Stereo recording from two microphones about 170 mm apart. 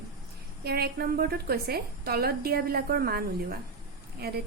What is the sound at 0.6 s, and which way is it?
A woman's voice, 65° right (ahead or behind).